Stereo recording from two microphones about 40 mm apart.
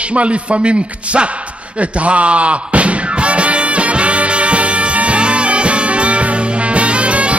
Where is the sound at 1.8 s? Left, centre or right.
Right.